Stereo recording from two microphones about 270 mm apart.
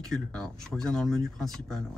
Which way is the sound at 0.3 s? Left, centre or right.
Centre.